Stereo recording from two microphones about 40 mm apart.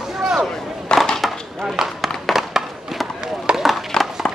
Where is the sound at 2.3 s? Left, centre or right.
Centre.